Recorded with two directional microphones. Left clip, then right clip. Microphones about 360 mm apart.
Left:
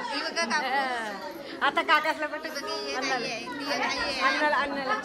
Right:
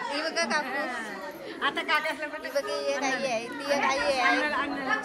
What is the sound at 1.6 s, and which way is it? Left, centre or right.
Speech, left.